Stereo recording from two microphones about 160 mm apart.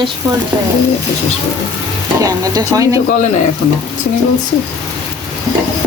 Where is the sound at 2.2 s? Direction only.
20° right (ahead or behind).